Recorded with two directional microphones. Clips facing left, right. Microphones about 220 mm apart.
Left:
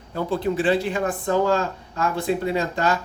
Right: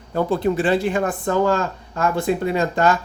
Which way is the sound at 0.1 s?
50° right (ahead or behind).